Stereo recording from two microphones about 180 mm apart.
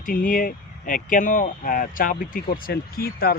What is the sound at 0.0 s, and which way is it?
Speech, 50° left (ahead or behind).